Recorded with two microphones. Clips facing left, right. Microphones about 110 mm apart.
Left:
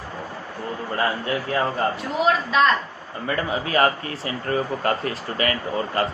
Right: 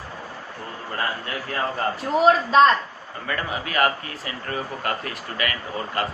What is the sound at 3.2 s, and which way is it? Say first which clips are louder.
Speech: left 4 dB; 30° left (ahead or behind).